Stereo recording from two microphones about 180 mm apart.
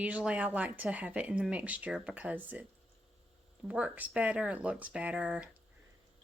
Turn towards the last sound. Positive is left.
turn(degrees=-5)  # may be behind; listen again after turning